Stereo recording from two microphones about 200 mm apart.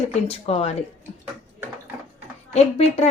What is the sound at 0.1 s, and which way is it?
Speech, 30° left (ahead or behind).